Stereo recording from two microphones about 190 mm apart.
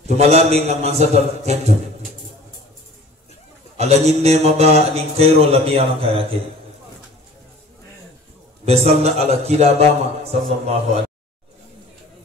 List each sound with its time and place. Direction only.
0.0 s mantra: 35° right (ahead or behind)
3.7 s mantra: 35° right (ahead or behind)
8.6 s mantra: 35° right (ahead or behind)